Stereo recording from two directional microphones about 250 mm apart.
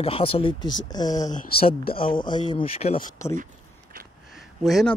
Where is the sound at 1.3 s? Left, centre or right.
Left.